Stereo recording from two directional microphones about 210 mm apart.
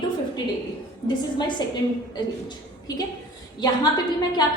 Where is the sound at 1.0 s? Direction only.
20° left (ahead or behind).